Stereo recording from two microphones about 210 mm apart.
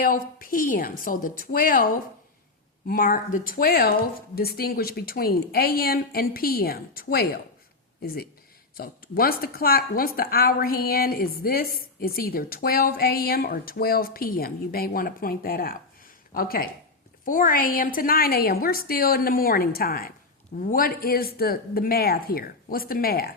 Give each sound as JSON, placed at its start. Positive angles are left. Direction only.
{"t": 0.0, "sound": "a woman's voice", "side_deg": 40}